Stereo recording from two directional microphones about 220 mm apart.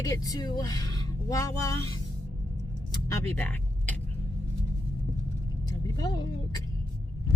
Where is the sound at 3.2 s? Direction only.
10° left (ahead or behind).